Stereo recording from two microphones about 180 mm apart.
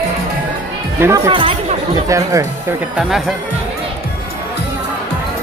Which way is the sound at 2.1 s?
15° right (ahead or behind).